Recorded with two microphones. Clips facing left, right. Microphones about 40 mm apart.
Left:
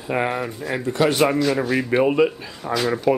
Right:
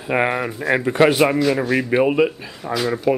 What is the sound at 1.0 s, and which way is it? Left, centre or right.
Speech, centre.